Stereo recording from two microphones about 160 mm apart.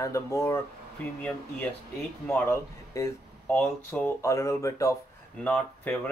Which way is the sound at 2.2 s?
15° left (ahead or behind).